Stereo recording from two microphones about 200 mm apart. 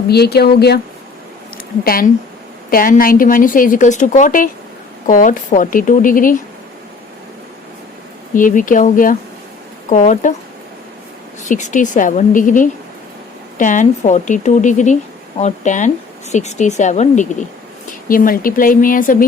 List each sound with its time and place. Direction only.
0.1 s a woman's voice: 55° left (ahead or behind)
1.8 s a woman's voice: 45° left (ahead or behind)
8.3 s a woman's voice: 40° left (ahead or behind)
11.4 s a woman's voice: 40° left (ahead or behind)